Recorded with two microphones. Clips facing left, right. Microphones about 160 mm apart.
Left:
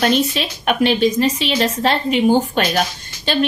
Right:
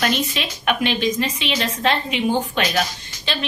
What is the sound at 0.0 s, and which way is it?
A woman's voice, 35° left (ahead or behind).